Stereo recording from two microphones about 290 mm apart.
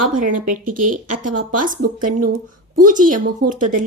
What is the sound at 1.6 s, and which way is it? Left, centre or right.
Speech, right.